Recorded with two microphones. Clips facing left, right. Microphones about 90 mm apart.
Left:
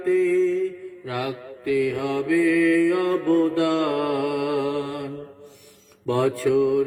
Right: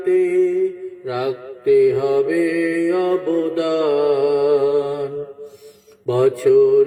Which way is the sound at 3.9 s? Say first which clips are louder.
Right 8 dB; 15° right (ahead or behind).